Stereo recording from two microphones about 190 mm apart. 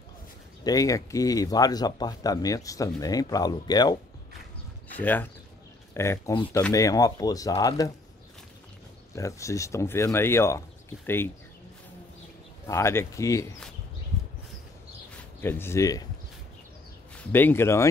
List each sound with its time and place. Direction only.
0.7 s speech: 20° left (ahead or behind)
4.9 s speech: 10° left (ahead or behind)
9.1 s speech: 15° left (ahead or behind)
12.6 s speech: 15° left (ahead or behind)
15.4 s speech: 10° left (ahead or behind)
17.3 s speech: 10° left (ahead or behind)